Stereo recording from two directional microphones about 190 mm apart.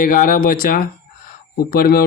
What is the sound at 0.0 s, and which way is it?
Speech, 45° left (ahead or behind).